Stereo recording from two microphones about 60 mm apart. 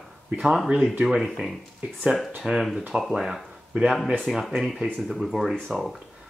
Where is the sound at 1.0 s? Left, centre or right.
Centre.